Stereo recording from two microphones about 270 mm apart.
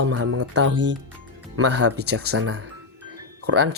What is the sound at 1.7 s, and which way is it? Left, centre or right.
Speech, right.